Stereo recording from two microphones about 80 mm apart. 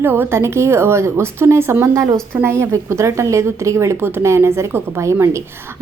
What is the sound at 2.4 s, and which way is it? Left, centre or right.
A woman's voice, right.